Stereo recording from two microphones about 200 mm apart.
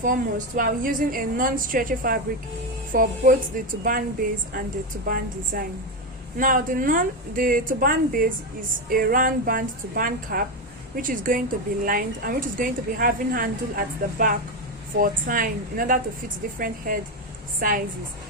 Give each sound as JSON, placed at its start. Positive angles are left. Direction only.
{"t": 0.0, "sound": "speech", "side_deg": -40}